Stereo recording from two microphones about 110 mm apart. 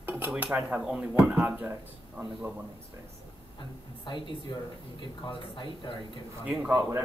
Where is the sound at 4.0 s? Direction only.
50° left (ahead or behind).